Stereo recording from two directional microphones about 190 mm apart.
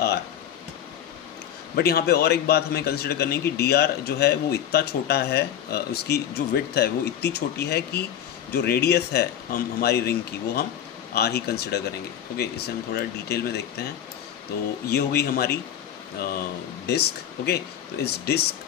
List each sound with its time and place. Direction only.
1.8 s speech: 55° left (ahead or behind)
14.9 s speech: 55° left (ahead or behind)